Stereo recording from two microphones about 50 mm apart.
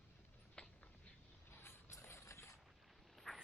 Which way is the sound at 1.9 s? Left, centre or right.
Left.